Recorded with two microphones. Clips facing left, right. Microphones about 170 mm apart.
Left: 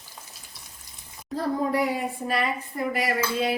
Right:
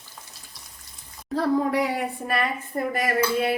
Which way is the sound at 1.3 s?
70° right (ahead or behind).